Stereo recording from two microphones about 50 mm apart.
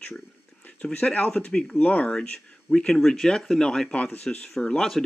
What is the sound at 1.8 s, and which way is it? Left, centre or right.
Speech, left.